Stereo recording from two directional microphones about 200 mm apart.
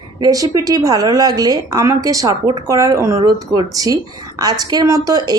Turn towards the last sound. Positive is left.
turn(degrees=-20)  # may be behind; listen again after turning